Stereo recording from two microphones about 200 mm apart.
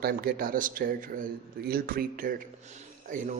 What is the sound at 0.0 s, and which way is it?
A man's voice, 45° right (ahead or behind).